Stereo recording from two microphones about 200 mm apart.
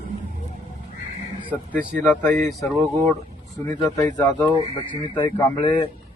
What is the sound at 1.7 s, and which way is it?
Speech, 10° left (ahead or behind).